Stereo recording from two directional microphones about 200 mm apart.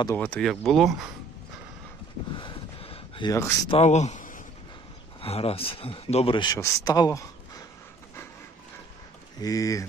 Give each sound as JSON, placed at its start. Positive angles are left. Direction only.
{"t": 0.0, "sound": "speech", "side_deg": 10}
{"t": 2.3, "sound": "a sound", "side_deg": 25}
{"t": 3.7, "sound": "speech", "side_deg": 35}
{"t": 5.2, "sound": "speech", "side_deg": 30}
{"t": 9.4, "sound": "speech", "side_deg": 15}